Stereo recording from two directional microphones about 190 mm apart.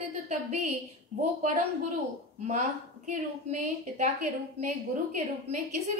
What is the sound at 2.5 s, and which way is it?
A woman's voice, 40° right (ahead or behind).